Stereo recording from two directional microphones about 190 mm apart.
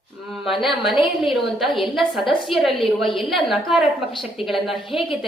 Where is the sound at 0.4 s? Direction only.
Centre (ahead or behind).